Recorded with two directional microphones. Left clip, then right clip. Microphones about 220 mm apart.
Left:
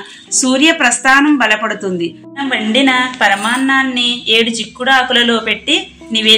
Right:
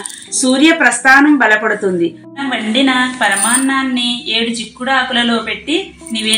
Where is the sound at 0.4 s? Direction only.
55° left (ahead or behind).